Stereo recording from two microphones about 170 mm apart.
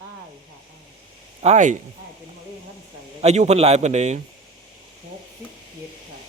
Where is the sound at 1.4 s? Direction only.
45° right (ahead or behind).